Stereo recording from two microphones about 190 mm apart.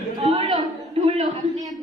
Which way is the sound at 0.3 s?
30° right (ahead or behind).